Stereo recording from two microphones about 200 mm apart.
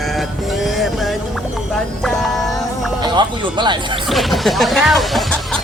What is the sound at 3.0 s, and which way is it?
Speech, 20° right (ahead or behind).